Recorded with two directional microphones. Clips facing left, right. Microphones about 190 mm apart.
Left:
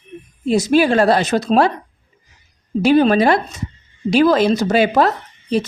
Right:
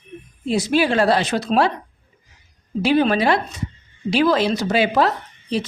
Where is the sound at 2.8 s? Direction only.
45° left (ahead or behind).